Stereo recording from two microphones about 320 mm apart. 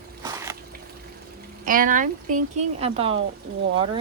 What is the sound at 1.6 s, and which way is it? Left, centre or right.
Speech, right.